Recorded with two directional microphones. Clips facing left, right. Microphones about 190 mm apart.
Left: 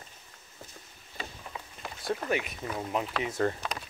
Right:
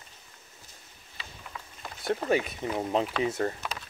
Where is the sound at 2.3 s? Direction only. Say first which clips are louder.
Right 4 dB; 30° right (ahead or behind).